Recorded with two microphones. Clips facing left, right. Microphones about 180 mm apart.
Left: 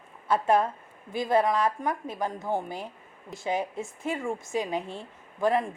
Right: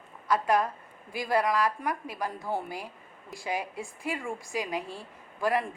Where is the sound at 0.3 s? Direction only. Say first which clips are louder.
Left 2 dB; 25° left (ahead or behind).